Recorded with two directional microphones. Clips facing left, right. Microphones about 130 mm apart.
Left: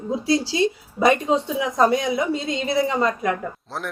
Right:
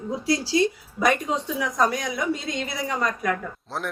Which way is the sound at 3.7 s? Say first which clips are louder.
Right 2 dB; centre (ahead or behind).